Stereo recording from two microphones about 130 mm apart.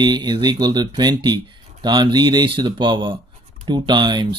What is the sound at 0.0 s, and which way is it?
Speech, 35° right (ahead or behind).